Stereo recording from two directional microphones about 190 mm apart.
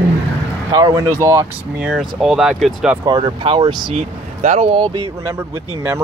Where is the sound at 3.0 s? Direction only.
25° right (ahead or behind).